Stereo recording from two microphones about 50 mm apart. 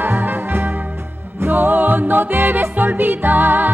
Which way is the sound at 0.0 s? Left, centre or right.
Right.